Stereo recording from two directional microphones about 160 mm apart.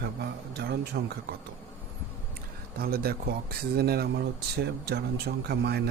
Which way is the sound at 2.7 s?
70° right (ahead or behind).